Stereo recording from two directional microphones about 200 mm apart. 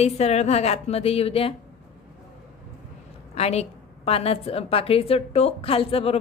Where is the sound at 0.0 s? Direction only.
30° left (ahead or behind).